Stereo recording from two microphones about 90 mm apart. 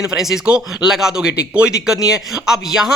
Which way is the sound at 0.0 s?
5° right (ahead or behind).